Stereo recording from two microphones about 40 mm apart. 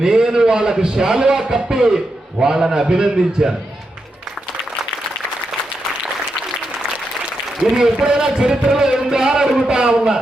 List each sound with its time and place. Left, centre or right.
0.0 s a man's voice: centre
7.6 s a man's voice: right